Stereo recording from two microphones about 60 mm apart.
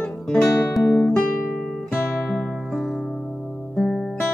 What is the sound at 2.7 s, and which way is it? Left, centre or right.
Music, centre.